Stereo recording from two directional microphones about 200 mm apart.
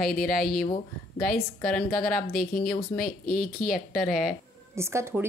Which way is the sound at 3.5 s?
Centre (ahead or behind).